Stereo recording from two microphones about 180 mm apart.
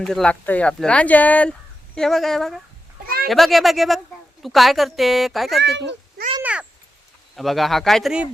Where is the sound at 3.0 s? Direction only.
55° right (ahead or behind).